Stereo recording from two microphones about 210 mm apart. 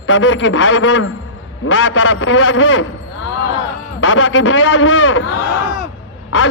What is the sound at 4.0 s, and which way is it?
A man's voice, 70° left (ahead or behind).